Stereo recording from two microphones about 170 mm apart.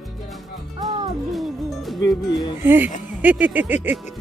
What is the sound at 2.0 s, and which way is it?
Speech, 20° left (ahead or behind).